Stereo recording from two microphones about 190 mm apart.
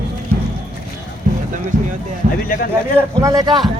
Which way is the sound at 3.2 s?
20° right (ahead or behind).